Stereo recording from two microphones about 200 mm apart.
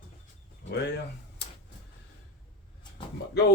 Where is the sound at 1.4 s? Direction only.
55° left (ahead or behind).